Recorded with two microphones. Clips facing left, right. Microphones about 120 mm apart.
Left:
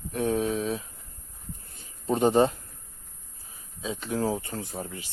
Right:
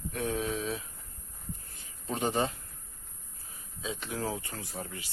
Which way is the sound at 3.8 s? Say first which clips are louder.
Left 6 dB; 30° left (ahead or behind).